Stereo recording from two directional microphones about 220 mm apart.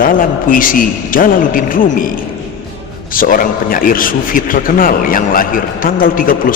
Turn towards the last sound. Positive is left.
turn(degrees=40)  # may be behind; listen again after turning